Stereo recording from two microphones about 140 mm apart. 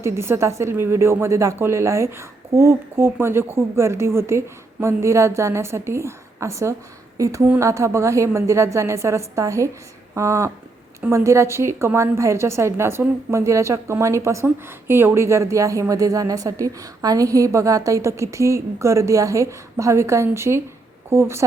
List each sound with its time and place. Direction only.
0.0 s a woman's voice: 20° right (ahead or behind)